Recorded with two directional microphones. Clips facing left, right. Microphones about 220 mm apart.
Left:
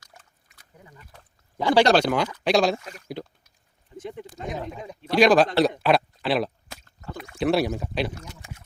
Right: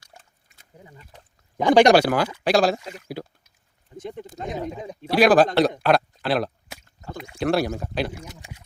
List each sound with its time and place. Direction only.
0.0 s a sound: 25° right (ahead or behind)
1.5 s speech: 15° right (ahead or behind); by 2.7 s centre (ahead or behind)
2.7 s speech: 15° right (ahead or behind)
5.1 s speech: 5° right (ahead or behind)
8.2 s speech: 15° right (ahead or behind)